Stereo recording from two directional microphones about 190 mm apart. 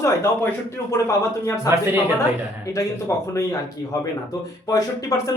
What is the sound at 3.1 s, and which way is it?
Speech, 15° left (ahead or behind).